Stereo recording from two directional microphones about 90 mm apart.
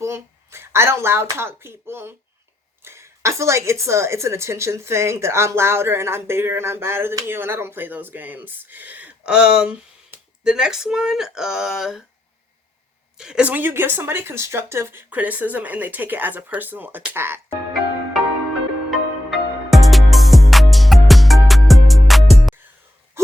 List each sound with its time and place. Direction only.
0.0 s a woman's voice: 30° right (ahead or behind); by 12.0 s 5° right (ahead or behind)
13.1 s a woman's voice: 10° right (ahead or behind); by 17.6 s 25° right (ahead or behind)
18.9 s music: centre (ahead or behind)